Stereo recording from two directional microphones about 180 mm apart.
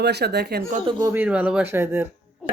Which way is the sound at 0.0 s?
65° right (ahead or behind).